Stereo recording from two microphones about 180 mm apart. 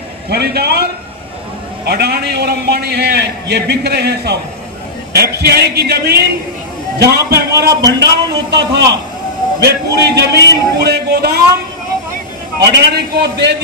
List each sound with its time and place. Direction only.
0.3 s a man's voice: 60° right (ahead or behind)
1.9 s a man's voice: 65° right (ahead or behind)
12.7 s a man's voice: 65° right (ahead or behind)